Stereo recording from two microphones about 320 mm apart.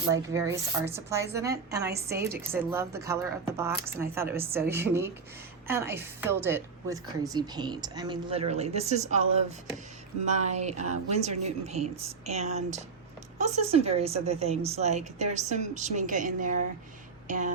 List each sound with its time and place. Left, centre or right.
0.1 s a woman's voice: centre
1.8 s a woman's voice: right
2.1 s a woman's voice: centre
10.2 s a woman's voice: right
17.2 s music: right